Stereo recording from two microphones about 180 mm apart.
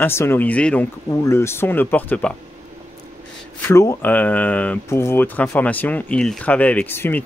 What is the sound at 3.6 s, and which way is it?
Speech, 15° left (ahead or behind).